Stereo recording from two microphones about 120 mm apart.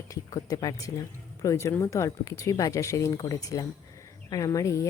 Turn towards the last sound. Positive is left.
turn(degrees=25)  # may be behind; listen again after turning